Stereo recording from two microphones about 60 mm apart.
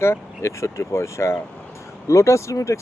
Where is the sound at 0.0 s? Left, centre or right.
Left.